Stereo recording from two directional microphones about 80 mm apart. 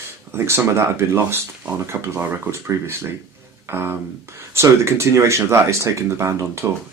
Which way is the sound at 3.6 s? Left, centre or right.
Right.